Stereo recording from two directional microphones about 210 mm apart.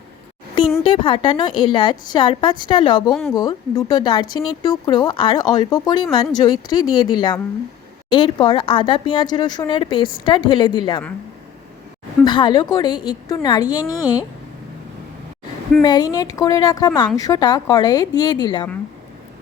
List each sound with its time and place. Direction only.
0.9 s speech: 25° left (ahead or behind)
3.1 s speech: 5° left (ahead or behind)
3.3 s speech: 15° left (ahead or behind)
12.2 s speech: 20° left (ahead or behind)
15.8 s a woman's voice: 20° left (ahead or behind)